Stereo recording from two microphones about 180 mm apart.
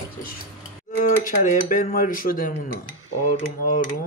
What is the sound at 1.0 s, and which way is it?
Speech, 45° left (ahead or behind).